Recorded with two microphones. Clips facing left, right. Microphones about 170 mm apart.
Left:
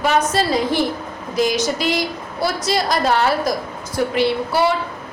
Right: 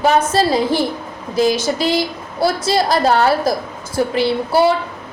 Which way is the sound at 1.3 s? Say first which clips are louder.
Right 3 dB; 30° right (ahead or behind).